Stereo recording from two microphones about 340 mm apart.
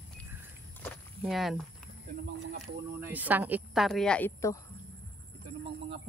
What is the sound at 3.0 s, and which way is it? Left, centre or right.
A woman's voice, centre.